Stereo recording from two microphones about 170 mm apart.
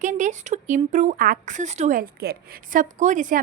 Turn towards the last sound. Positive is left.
turn(degrees=-50)  # may be behind; listen again after turning